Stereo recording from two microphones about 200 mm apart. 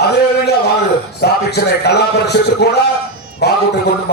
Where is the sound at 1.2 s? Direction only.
55° left (ahead or behind).